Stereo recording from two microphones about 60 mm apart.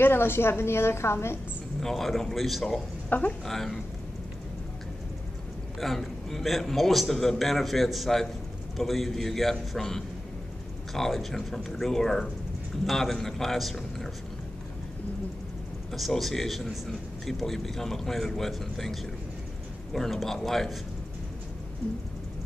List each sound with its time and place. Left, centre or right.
0.0 s a woman's voice: left
1.8 s speech: centre
3.1 s speech: left
3.4 s speech: centre
5.8 s speech: centre
15.9 s speech: centre